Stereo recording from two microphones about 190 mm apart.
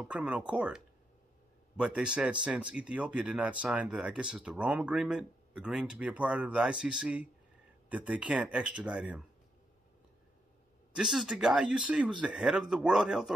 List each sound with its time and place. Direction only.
0.0 s speech: 5° right (ahead or behind)
11.0 s speech: 5° right (ahead or behind)